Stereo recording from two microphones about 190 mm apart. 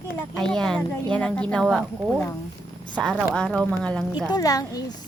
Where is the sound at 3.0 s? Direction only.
Centre (ahead or behind).